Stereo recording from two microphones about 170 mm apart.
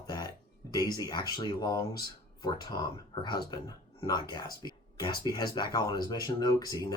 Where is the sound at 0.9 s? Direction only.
20° left (ahead or behind).